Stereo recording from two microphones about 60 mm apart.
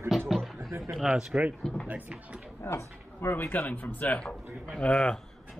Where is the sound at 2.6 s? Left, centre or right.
Left.